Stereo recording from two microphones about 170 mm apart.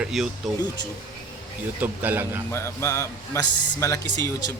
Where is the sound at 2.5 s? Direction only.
15° left (ahead or behind).